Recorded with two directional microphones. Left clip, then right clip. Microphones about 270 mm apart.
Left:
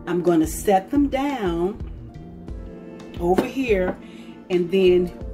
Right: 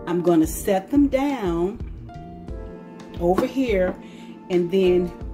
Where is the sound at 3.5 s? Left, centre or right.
Right.